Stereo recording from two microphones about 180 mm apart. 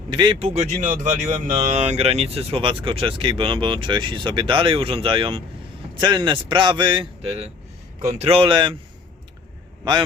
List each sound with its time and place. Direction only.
0.1 s speech: 25° right (ahead or behind)